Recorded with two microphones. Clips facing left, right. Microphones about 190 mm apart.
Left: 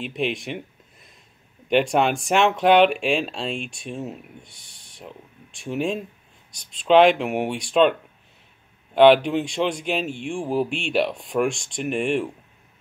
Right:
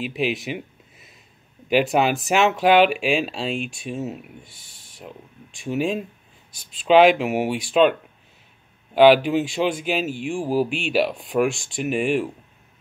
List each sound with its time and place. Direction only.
0.0 s a sound: 5° right (ahead or behind)
1.7 s speech: 5° right (ahead or behind)
8.9 s speech: 5° right (ahead or behind)